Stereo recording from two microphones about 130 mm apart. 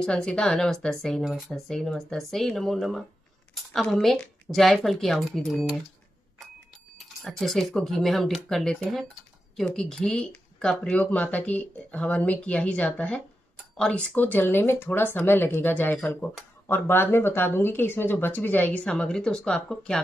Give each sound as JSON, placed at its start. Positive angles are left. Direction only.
{"t": 0.0, "sound": "speech", "side_deg": 5}
{"t": 7.2, "sound": "speech", "side_deg": 0}